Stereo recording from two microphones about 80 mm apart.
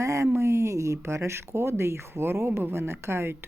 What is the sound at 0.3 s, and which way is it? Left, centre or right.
Speech, right.